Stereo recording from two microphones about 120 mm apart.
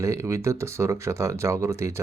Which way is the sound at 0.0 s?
25° right (ahead or behind).